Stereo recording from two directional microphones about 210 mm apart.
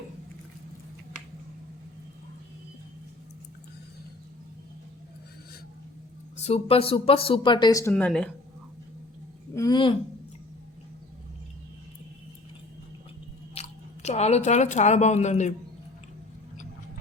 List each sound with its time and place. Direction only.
6.3 s speech: 30° left (ahead or behind); by 8.3 s 5° left (ahead or behind)
9.6 s a sound: 20° left (ahead or behind)
13.5 s speech: 30° left (ahead or behind)